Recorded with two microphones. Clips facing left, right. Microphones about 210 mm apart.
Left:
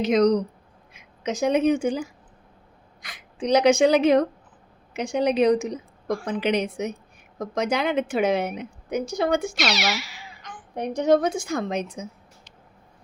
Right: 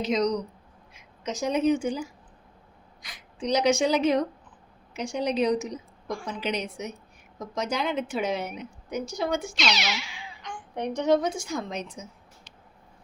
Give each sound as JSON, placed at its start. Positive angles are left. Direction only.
{"t": 0.0, "sound": "a woman's voice", "side_deg": 55}
{"t": 9.6, "sound": "speech", "side_deg": 5}
{"t": 9.9, "sound": "babbling", "side_deg": 5}
{"t": 10.9, "sound": "a woman's voice", "side_deg": 50}